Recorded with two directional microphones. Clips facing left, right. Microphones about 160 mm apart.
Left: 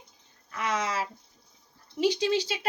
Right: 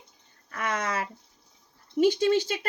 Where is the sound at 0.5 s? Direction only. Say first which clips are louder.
Even; 55° right (ahead or behind).